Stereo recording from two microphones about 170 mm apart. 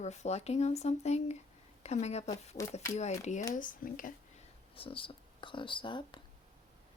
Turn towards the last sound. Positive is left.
turn(degrees=30)  # may be behind; listen again after turning